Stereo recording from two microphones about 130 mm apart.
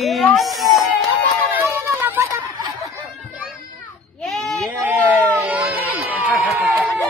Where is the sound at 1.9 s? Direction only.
20° right (ahead or behind).